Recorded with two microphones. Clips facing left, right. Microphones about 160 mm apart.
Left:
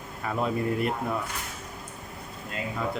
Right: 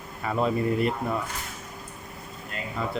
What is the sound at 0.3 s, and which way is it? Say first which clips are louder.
Speech: right 3 dB; centre (ahead or behind).